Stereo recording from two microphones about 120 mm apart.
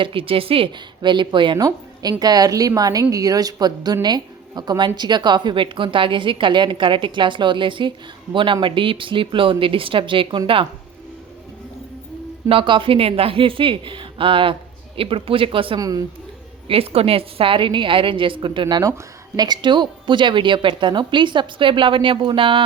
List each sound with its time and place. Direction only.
0.0 s a woman's voice: 45° right (ahead or behind)
12.5 s a woman's voice: 45° right (ahead or behind)
15.8 s speech: 30° right (ahead or behind)
16.6 s a woman's voice: 55° right (ahead or behind)